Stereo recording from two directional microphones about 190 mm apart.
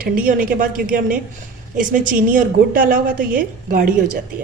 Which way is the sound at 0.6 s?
45° right (ahead or behind).